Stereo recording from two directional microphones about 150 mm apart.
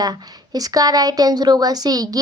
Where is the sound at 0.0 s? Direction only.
25° right (ahead or behind).